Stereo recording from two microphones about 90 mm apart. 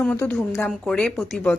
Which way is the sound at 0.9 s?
10° left (ahead or behind).